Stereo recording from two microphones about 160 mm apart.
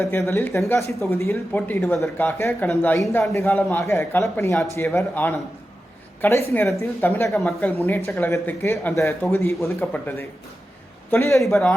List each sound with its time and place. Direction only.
0.0 s speech: 15° left (ahead or behind)
6.5 s speech: 15° left (ahead or behind)
7.3 s speech: centre (ahead or behind)
11.4 s speech: centre (ahead or behind)